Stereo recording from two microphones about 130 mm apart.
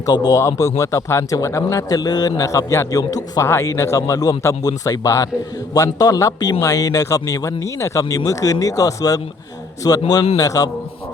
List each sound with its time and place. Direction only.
0.0 s a man's voice: 30° left (ahead or behind)